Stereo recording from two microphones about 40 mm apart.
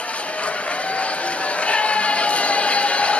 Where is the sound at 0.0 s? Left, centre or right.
Left.